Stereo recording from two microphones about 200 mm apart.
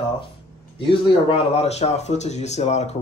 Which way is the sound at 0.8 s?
25° left (ahead or behind).